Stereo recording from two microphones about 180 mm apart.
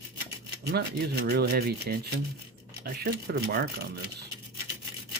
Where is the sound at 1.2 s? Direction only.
60° right (ahead or behind).